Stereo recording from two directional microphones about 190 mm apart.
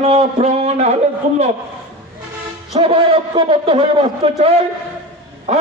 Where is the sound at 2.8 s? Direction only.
30° right (ahead or behind).